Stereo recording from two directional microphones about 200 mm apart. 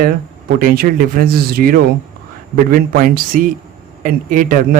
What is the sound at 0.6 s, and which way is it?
Speech, 45° right (ahead or behind).